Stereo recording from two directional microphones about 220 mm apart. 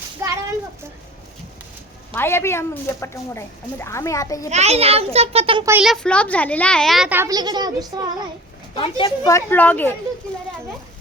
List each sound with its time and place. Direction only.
0.2 s a sound: 10° right (ahead or behind)
2.1 s a woman's voice: 10° left (ahead or behind)
4.4 s a child's voice: 30° right (ahead or behind)
5.6 s speech: 5° right (ahead or behind)
8.7 s a woman's voice: 20° left (ahead or behind)